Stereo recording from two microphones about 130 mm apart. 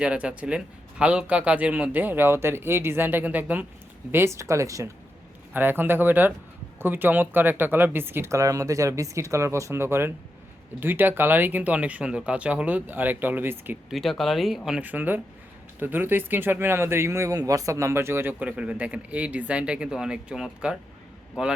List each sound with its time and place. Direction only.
0.0 s speech: 10° right (ahead or behind)
13.9 s speech: centre (ahead or behind)